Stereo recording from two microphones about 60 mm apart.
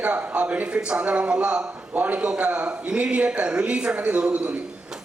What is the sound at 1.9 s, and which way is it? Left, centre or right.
A man's voice, right.